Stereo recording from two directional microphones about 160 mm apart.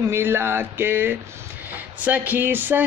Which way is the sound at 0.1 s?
15° right (ahead or behind).